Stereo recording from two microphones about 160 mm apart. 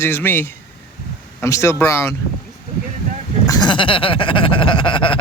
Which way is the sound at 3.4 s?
25° left (ahead or behind).